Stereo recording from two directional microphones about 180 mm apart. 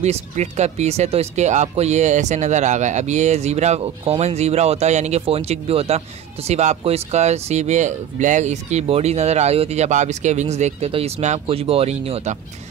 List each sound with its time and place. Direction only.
0.0 s speech: 40° right (ahead or behind)